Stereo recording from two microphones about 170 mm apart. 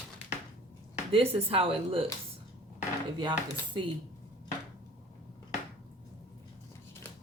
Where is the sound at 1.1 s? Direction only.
35° right (ahead or behind).